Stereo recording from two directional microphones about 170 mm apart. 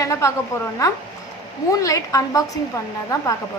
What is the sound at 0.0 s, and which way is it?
A woman's voice, 15° left (ahead or behind).